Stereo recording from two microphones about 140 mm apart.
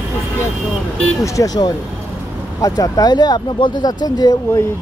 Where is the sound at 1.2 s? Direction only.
25° left (ahead or behind).